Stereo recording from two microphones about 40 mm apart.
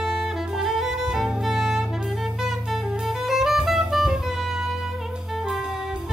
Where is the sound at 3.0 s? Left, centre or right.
Centre.